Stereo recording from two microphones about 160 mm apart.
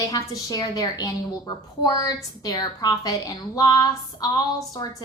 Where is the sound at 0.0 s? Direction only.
25° left (ahead or behind).